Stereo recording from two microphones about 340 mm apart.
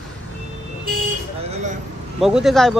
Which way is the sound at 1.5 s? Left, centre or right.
Right.